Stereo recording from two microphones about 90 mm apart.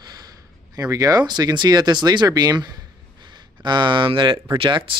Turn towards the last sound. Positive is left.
turn(degrees=-70)  # may be behind; listen again after turning